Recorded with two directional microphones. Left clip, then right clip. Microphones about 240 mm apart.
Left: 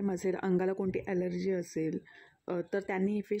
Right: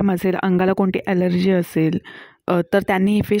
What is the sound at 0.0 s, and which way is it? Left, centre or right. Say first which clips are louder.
Speech: right 13 dB; right.